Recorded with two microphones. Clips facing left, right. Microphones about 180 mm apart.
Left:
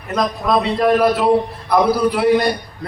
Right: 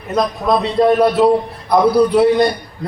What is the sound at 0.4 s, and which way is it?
A man's voice, 25° right (ahead or behind).